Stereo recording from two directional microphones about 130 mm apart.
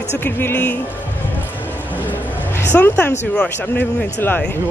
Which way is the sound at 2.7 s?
10° left (ahead or behind).